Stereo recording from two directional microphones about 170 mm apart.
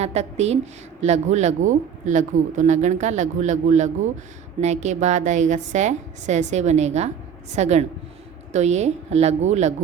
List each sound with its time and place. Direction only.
0.0 s a woman's voice: 40° right (ahead or behind)